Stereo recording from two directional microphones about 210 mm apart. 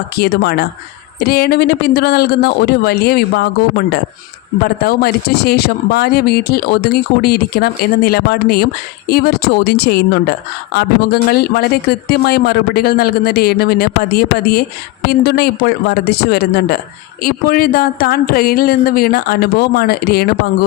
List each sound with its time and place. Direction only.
0.2 s a woman's voice: 50° left (ahead or behind)